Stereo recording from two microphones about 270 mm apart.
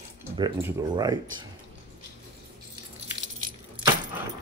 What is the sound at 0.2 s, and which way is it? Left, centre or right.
Speech, centre.